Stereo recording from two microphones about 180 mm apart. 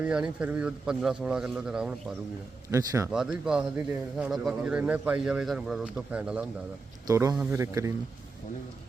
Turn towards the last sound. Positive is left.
turn(degrees=-15)  # may be behind; listen again after turning